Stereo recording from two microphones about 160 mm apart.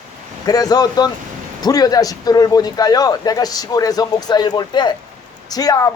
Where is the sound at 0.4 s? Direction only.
25° left (ahead or behind).